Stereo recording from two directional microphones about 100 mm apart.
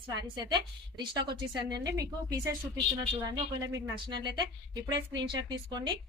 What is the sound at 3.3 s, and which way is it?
Speech, 45° right (ahead or behind).